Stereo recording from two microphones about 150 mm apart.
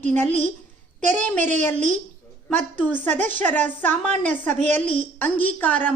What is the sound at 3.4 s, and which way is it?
A woman's voice, 10° left (ahead or behind).